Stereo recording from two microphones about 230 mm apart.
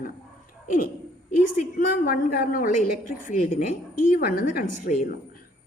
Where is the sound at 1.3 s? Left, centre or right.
Left.